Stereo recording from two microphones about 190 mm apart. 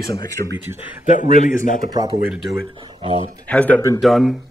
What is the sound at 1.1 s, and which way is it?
Speech, 40° left (ahead or behind).